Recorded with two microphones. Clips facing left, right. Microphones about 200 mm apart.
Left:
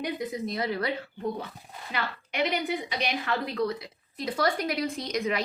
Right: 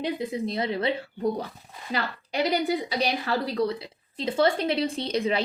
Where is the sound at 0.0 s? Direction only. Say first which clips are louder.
Right 3 dB; 30° right (ahead or behind).